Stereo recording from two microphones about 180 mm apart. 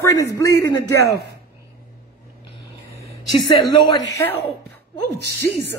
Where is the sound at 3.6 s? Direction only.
20° left (ahead or behind).